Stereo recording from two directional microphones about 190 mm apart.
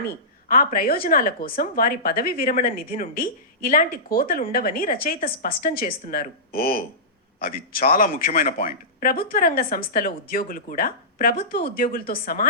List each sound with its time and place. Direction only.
0.4 s speech: 50° left (ahead or behind)